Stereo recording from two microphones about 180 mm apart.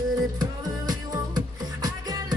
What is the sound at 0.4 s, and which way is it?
Music, 20° right (ahead or behind).